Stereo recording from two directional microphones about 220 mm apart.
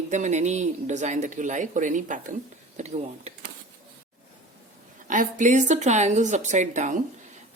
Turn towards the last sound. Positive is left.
turn(degrees=-35)  # may be behind; listen again after turning